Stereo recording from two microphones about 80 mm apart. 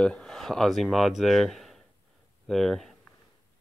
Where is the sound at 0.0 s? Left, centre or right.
Centre.